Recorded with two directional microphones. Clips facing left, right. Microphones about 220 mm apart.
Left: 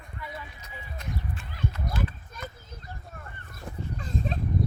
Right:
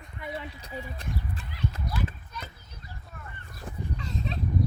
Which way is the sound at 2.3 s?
45° left (ahead or behind).